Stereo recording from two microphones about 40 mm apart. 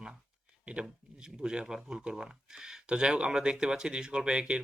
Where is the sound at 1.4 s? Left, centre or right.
Right.